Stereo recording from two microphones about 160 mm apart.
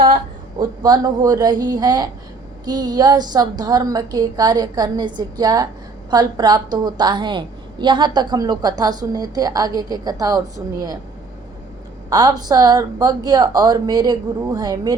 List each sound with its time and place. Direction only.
0.6 s a woman's voice: 25° right (ahead or behind)
12.1 s a woman's voice: 25° right (ahead or behind)